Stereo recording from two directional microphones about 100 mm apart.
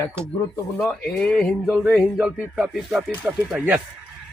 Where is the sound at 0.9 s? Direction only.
10° left (ahead or behind).